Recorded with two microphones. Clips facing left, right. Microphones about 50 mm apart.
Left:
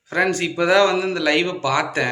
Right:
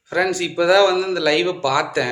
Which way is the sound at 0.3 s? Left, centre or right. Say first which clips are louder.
Right 4 dB; left.